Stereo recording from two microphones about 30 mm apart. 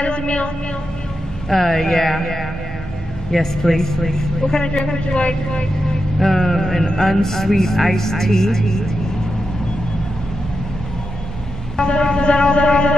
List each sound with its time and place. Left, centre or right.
0.0 s speech: left
1.5 s a man's voice: centre
4.9 s speech: left
6.1 s a man's voice: centre
11.8 s vehicle: left